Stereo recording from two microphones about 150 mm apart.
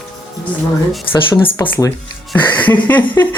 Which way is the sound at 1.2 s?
35° left (ahead or behind).